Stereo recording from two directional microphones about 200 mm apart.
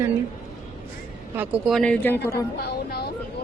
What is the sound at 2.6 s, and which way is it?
Speech, 50° left (ahead or behind).